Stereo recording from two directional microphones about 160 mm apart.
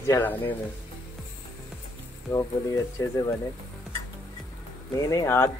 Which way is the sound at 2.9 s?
20° left (ahead or behind).